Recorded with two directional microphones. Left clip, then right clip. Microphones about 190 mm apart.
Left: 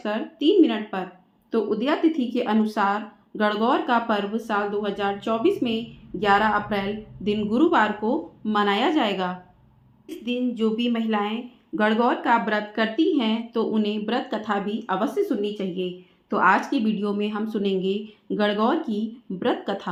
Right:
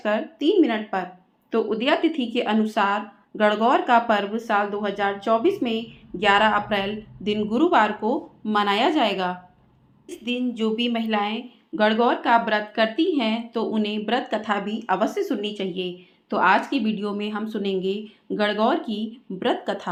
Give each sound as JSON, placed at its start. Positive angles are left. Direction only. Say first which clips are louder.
{"t": 0.0, "sound": "a woman's voice", "louder": "right 1 dB", "side_deg": -25}